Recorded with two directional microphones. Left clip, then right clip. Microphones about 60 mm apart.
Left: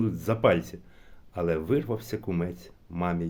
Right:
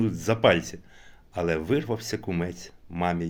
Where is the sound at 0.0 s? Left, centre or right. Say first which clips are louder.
Right 2 dB; left.